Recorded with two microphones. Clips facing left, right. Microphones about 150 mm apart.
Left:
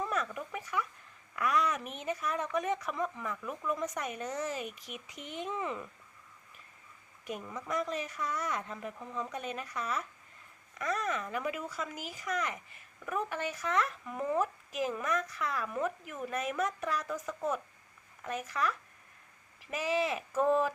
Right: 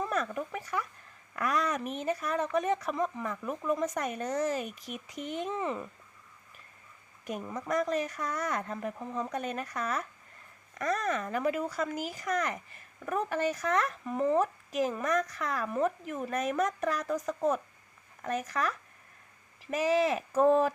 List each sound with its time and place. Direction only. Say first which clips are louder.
0.1 s speech: right 3 dB; 35° right (ahead or behind)
2.9 s speech: right 4 dB; 20° right (ahead or behind)
3.2 s speech: right 4 dB; 35° right (ahead or behind)
5.5 s speech: right 3 dB; 30° right (ahead or behind)
7.3 s speech: right 4 dB; 40° right (ahead or behind)
14.0 s speech: right 5 dB; 25° right (ahead or behind)
19.7 s speech: right 5 dB; 40° right (ahead or behind)